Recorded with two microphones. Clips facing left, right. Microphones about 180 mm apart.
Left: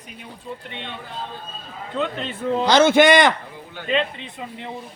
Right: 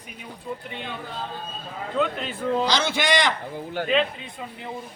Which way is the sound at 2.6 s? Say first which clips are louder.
Left 10 dB; 55° left (ahead or behind).